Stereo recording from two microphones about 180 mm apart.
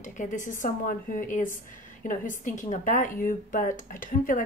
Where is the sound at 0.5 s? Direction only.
50° left (ahead or behind).